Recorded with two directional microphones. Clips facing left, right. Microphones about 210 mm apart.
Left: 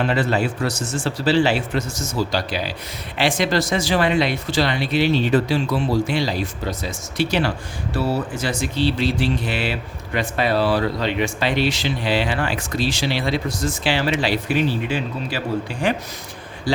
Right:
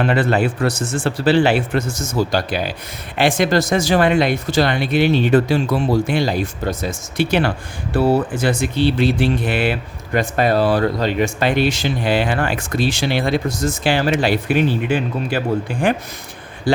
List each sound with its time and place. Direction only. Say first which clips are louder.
0.0 s a man's voice: right 3 dB; 55° right (ahead or behind)